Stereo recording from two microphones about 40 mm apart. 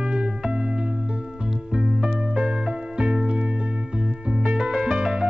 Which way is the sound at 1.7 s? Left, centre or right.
Right.